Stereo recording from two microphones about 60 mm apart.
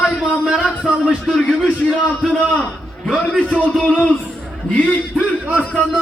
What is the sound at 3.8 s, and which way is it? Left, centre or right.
Music, left.